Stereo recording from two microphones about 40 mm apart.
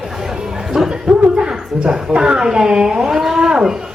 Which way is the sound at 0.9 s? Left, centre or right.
Right.